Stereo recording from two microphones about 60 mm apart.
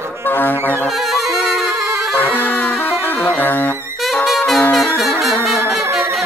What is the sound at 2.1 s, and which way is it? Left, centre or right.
Music, left.